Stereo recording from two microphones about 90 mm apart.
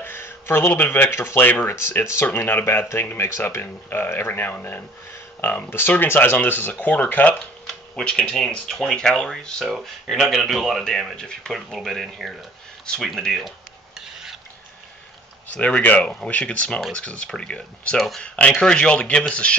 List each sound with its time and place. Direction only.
0.0 s speech: 25° left (ahead or behind)
1.8 s speech: 30° left (ahead or behind); by 9.7 s 10° left (ahead or behind)
9.7 s speech: 5° right (ahead or behind)
13.9 s filing: 5° right (ahead or behind)
15.4 s speech: 15° left (ahead or behind)